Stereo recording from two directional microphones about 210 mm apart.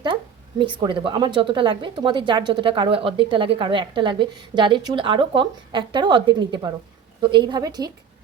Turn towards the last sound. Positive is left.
turn(degrees=-20)  # may be behind; listen again after turning